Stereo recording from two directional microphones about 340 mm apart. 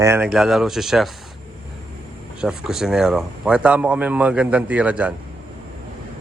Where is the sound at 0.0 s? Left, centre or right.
Centre.